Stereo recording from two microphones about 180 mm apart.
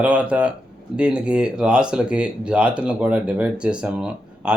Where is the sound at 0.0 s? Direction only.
5° right (ahead or behind).